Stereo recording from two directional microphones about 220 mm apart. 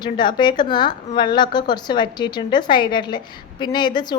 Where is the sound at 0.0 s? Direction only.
20° left (ahead or behind).